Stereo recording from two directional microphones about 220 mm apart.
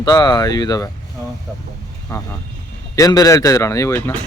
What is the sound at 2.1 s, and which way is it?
Speech, 15° left (ahead or behind).